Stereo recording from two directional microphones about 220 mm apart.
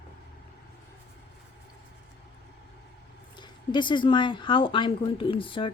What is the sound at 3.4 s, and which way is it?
Speech, 20° left (ahead or behind).